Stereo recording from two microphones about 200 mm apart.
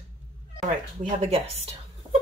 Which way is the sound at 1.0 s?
35° right (ahead or behind).